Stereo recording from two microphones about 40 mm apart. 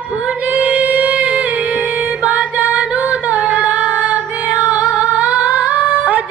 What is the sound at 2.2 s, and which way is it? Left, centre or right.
Female singing, right.